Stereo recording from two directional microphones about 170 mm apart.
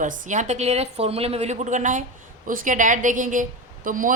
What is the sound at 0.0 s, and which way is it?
A woman's voice, 45° right (ahead or behind).